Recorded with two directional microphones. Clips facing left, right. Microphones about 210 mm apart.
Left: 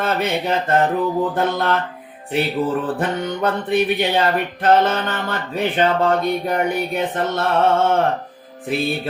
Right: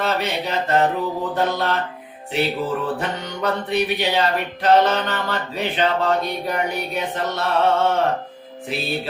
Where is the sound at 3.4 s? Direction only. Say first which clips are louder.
Left 2 dB; 50° left (ahead or behind).